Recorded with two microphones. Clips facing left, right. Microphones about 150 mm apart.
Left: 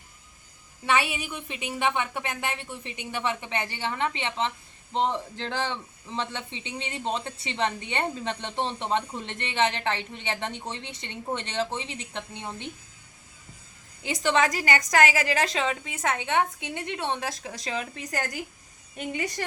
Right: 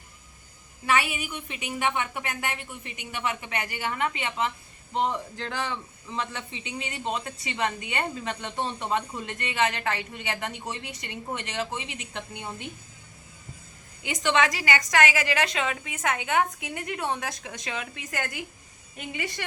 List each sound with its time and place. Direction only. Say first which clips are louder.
0.9 s a woman's voice: even; 30° left (ahead or behind)
14.0 s a woman's voice: even; 35° left (ahead or behind)